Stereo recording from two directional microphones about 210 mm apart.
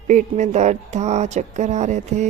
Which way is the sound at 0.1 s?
35° right (ahead or behind).